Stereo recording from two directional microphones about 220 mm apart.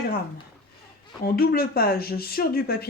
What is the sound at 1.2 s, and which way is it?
Speech, 45° left (ahead or behind).